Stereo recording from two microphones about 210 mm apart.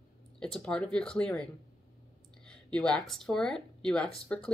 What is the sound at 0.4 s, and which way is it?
Speech, 5° left (ahead or behind).